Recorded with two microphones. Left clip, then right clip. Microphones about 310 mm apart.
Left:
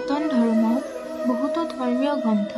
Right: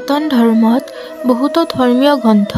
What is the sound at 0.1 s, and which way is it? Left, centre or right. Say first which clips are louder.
A woman's voice: right 10 dB; right.